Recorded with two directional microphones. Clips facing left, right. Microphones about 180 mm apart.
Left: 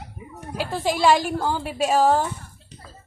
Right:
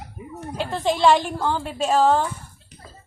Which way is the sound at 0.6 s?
5° left (ahead or behind).